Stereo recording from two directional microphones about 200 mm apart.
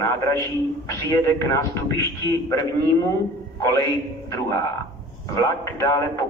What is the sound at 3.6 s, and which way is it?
A man's voice, 15° left (ahead or behind).